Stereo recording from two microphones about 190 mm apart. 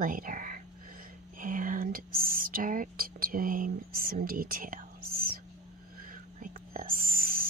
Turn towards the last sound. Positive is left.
turn(degrees=-50)  # may be behind; listen again after turning